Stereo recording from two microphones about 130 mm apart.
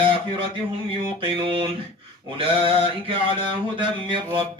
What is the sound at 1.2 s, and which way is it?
Mantra, 40° right (ahead or behind).